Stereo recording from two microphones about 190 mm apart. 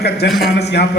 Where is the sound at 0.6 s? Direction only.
60° left (ahead or behind).